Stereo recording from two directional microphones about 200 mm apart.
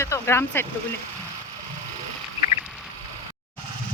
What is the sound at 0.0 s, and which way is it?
Speech, 15° left (ahead or behind).